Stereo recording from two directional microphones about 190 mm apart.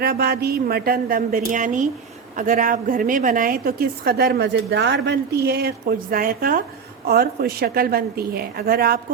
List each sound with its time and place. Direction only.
0.0 s a woman's voice: 55° right (ahead or behind)